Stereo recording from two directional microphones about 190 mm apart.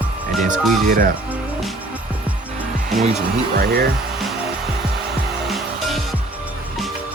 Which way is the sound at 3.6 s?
50° right (ahead or behind).